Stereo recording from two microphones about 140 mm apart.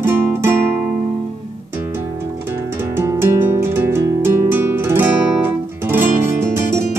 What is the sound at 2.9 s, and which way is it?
Music, 15° right (ahead or behind).